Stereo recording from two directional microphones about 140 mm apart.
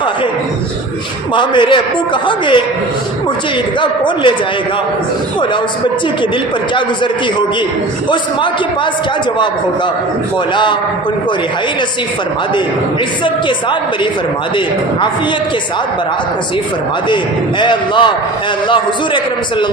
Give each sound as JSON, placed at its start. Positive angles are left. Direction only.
{"t": 1.4, "sound": "a man's voice", "side_deg": 35}
{"t": 3.8, "sound": "a man's voice", "side_deg": 35}
{"t": 10.5, "sound": "a man's voice", "side_deg": 35}
{"t": 13.2, "sound": "a man's voice", "side_deg": 35}
{"t": 17.6, "sound": "a man's voice", "side_deg": 35}